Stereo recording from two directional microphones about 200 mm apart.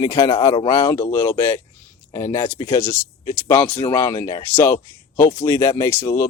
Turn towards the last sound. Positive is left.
turn(degrees=15)  # may be behind; listen again after turning